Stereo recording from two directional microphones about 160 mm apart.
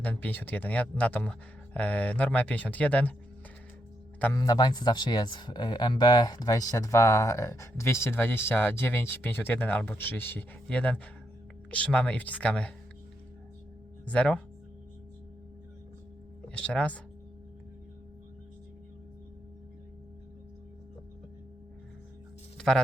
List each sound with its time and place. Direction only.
0.0 s speech: 10° left (ahead or behind)
4.4 s speech: 25° left (ahead or behind); by 12.7 s 5° left (ahead or behind)
14.1 s speech: 5° left (ahead or behind)
16.6 s speech: 10° left (ahead or behind)
22.5 s music: 5° left (ahead or behind)